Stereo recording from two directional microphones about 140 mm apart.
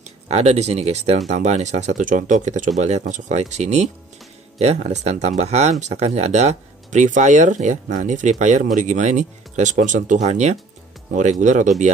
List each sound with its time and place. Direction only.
0.3 s speech: 50° right (ahead or behind)